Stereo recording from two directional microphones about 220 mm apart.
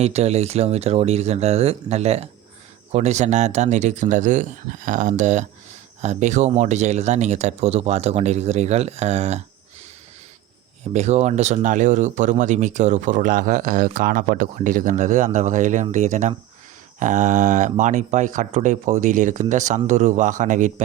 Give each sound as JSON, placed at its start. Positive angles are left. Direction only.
{"t": 0.0, "sound": "speech", "side_deg": -30}
{"t": 10.9, "sound": "speech", "side_deg": -30}